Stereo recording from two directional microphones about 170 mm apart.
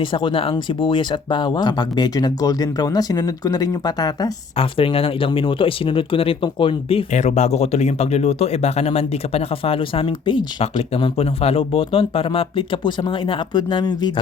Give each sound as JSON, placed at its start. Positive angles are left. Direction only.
{"t": 0.0, "sound": "speech", "side_deg": 30}
{"t": 4.5, "sound": "speech", "side_deg": 35}